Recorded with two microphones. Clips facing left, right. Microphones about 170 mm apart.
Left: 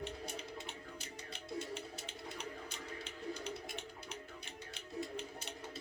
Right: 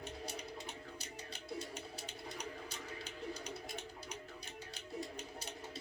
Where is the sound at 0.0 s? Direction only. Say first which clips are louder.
Left 1 dB; 40° right (ahead or behind).